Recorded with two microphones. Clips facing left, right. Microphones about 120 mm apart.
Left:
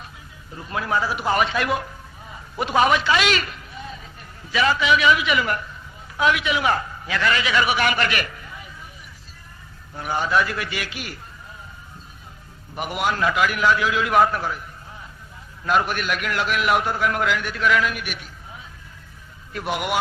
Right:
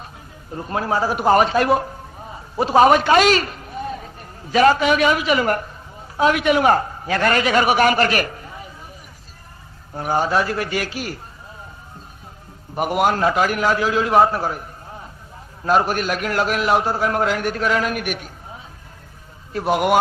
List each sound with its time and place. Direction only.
0.5 s a man's voice: 40° right (ahead or behind)
9.9 s a man's voice: 40° right (ahead or behind)
12.7 s a man's voice: 45° right (ahead or behind)